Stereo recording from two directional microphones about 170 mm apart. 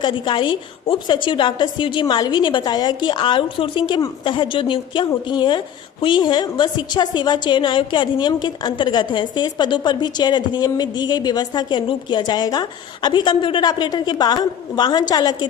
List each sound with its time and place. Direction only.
0.0 s a woman's voice: 30° left (ahead or behind)